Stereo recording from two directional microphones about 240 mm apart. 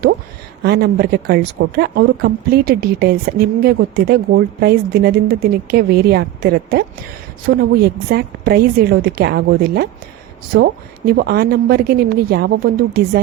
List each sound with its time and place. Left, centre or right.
0.6 s speech: right